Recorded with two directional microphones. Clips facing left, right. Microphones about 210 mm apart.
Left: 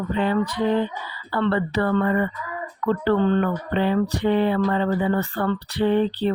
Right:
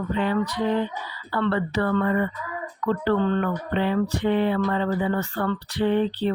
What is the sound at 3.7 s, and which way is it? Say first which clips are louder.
Speech: left 2 dB; 35° left (ahead or behind).